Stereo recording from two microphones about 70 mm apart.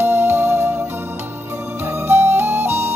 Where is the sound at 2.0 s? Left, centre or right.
Right.